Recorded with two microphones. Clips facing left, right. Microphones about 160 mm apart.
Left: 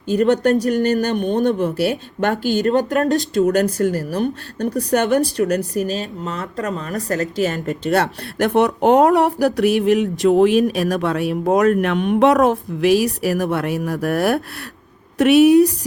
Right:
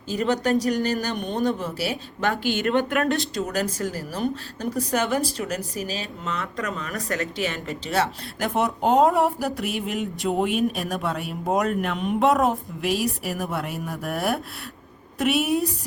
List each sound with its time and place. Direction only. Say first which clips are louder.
0.2 s a woman's voice: left 7 dB; 65° left (ahead or behind)
0.6 s speech: left 6 dB; 55° left (ahead or behind)
3.4 s a woman's voice: left 10 dB; 65° left (ahead or behind)
5.9 s a woman's voice: left 6 dB; 40° left (ahead or behind); by 15.7 s 75° left (ahead or behind)